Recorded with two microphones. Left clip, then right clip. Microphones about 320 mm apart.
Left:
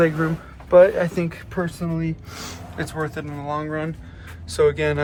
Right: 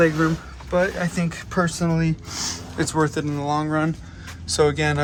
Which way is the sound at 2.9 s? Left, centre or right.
Centre.